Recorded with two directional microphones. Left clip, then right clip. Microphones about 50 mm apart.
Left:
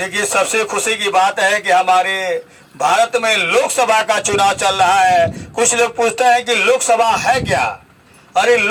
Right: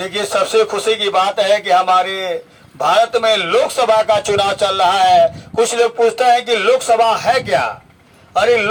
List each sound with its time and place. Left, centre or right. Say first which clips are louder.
0.0 s a man's voice: left 1 dB; left